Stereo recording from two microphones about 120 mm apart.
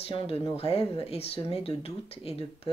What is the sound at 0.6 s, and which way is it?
Speech, 55° left (ahead or behind).